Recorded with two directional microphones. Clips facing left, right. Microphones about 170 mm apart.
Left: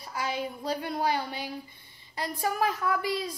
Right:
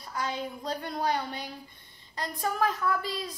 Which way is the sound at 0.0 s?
10° left (ahead or behind).